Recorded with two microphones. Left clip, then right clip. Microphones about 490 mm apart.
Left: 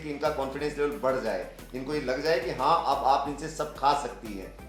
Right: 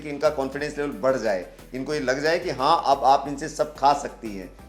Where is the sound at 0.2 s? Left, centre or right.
Right.